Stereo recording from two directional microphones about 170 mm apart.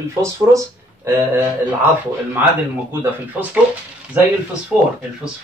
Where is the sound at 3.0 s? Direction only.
10° right (ahead or behind).